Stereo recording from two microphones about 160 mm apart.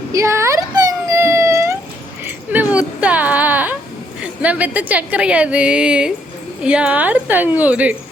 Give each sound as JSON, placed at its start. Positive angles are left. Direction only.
{"t": 0.1, "sound": "dog", "side_deg": -20}
{"t": 2.2, "sound": "a sound", "side_deg": -10}
{"t": 4.2, "sound": "a woman's voice", "side_deg": -10}